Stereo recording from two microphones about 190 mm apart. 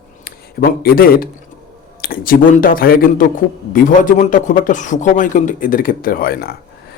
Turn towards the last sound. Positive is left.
turn(degrees=55)  # may be behind; listen again after turning